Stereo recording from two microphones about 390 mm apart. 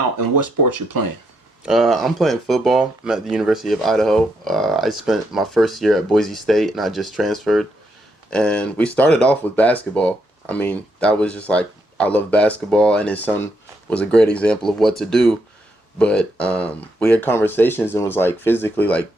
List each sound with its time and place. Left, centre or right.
1.6 s speech: centre